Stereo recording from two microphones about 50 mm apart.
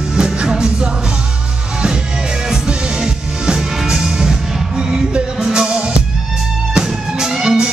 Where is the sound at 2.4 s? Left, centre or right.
Centre.